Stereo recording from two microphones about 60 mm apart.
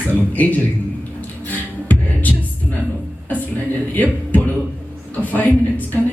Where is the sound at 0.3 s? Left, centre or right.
Left.